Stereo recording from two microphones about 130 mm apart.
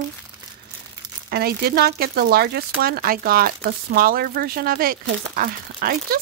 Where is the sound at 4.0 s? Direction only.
90° right.